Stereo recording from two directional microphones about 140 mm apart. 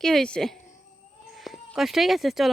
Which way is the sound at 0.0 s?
5° left (ahead or behind).